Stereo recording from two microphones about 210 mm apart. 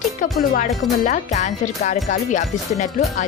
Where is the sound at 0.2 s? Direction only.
40° left (ahead or behind).